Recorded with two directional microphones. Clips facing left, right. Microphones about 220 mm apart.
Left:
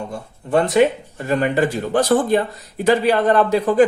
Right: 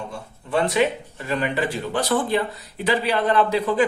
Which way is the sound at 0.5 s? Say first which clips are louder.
Left 5 dB; 45° left (ahead or behind).